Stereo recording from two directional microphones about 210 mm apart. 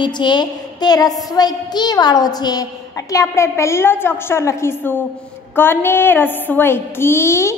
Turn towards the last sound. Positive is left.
turn(degrees=10)  # may be behind; listen again after turning